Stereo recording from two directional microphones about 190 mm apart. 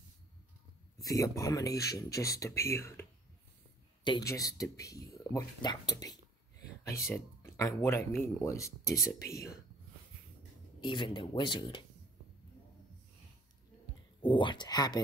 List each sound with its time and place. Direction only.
1.0 s speech: 15° left (ahead or behind)
8.9 s speech: 50° left (ahead or behind)
10.8 s speech: 25° left (ahead or behind)
14.2 s speech: 25° left (ahead or behind)